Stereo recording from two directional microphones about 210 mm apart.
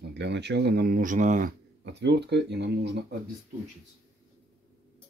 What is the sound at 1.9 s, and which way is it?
Speech, 55° right (ahead or behind).